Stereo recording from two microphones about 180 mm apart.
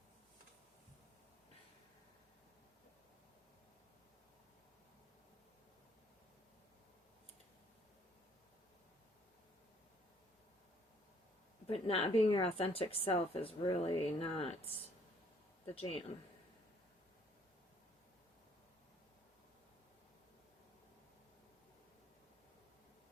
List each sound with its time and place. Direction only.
11.7 s speech: 35° left (ahead or behind)